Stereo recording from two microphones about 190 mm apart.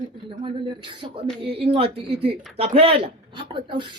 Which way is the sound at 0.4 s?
25° right (ahead or behind).